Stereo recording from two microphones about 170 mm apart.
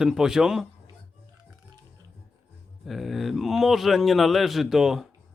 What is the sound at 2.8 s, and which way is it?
Speech, centre (ahead or behind).